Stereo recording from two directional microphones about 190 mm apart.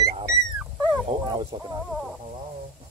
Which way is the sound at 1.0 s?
30° right (ahead or behind).